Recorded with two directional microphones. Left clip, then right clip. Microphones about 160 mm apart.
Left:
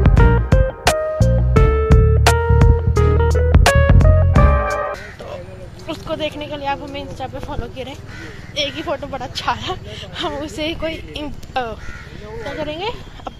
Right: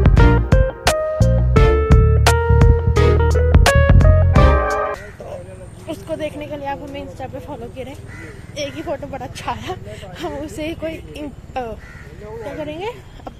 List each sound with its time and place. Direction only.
0.0 s music: centre (ahead or behind)
5.9 s speech: centre (ahead or behind)